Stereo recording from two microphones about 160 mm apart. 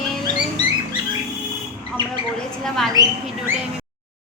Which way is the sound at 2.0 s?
30° right (ahead or behind).